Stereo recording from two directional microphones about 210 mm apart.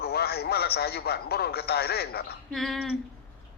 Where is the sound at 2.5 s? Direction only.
Centre (ahead or behind).